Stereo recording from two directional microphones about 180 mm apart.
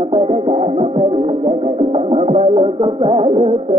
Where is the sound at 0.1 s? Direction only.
35° right (ahead or behind).